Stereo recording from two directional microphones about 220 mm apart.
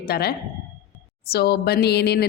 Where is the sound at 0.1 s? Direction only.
45° left (ahead or behind).